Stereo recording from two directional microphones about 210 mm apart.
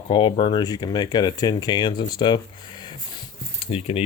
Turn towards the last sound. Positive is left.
turn(degrees=25)  # may be behind; listen again after turning